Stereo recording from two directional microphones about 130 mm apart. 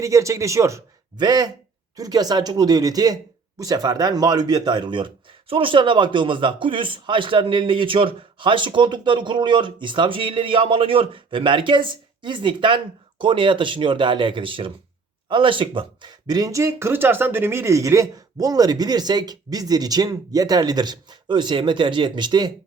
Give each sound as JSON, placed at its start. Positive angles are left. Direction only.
{"t": 0.0, "sound": "speech", "side_deg": -25}